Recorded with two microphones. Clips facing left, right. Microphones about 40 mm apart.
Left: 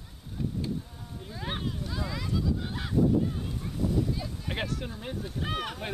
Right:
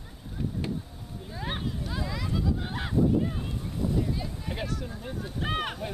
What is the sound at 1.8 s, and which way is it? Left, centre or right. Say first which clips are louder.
Speech: right 1 dB; centre.